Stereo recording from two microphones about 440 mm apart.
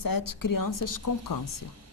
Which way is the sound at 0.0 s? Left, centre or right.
Left.